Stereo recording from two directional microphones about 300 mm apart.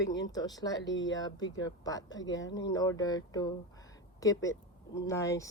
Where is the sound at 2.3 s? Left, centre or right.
Left.